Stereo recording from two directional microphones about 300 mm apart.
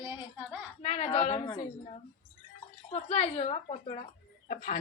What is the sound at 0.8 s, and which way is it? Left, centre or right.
Speech, left.